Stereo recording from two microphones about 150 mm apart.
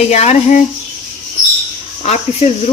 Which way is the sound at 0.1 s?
45° left (ahead or behind).